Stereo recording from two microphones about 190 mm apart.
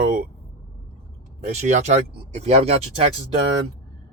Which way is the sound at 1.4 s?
35° right (ahead or behind).